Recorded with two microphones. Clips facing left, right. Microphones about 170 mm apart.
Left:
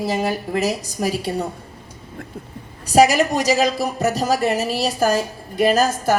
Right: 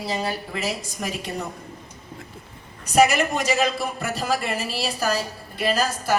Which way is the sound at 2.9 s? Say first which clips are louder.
Left 4 dB; 35° left (ahead or behind).